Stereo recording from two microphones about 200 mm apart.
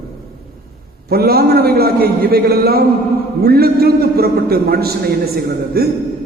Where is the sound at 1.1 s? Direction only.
50° right (ahead or behind).